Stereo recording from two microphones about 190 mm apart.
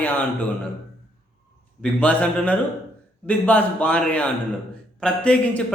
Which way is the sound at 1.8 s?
5° left (ahead or behind).